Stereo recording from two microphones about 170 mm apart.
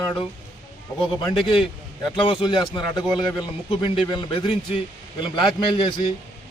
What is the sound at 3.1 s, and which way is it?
Speech, 5° right (ahead or behind).